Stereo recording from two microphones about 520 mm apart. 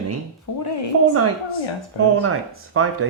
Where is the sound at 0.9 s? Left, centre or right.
Right.